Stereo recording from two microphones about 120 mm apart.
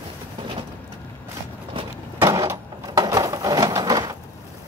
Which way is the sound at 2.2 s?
30° right (ahead or behind).